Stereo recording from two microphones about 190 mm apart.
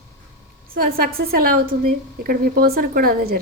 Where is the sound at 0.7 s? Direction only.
50° right (ahead or behind).